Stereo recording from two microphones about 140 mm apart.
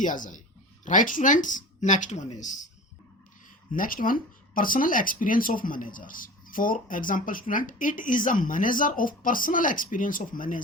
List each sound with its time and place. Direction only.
0.0 s speech: 70° left (ahead or behind)
3.7 s speech: 80° left